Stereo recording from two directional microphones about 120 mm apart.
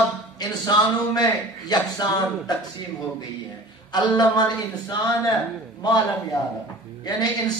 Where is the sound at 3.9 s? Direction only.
40° left (ahead or behind).